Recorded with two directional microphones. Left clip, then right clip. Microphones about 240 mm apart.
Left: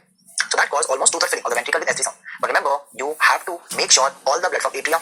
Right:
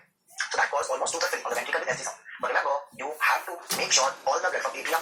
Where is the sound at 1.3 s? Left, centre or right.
Left.